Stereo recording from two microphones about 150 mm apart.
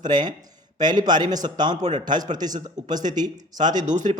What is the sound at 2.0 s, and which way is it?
Speech, 30° right (ahead or behind).